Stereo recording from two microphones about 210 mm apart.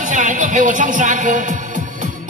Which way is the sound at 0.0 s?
35° right (ahead or behind).